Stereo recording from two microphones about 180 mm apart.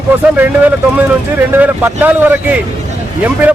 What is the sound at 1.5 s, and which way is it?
A man's voice, 10° right (ahead or behind).